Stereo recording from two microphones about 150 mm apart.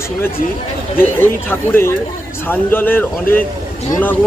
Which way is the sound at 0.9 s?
15° left (ahead or behind).